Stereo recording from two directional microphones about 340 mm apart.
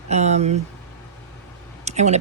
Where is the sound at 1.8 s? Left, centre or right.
Centre.